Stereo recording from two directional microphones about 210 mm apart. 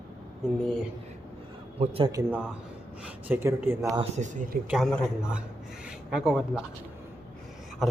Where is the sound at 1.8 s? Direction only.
30° right (ahead or behind).